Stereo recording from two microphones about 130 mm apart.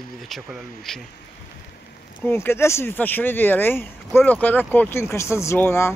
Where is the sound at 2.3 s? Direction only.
20° left (ahead or behind).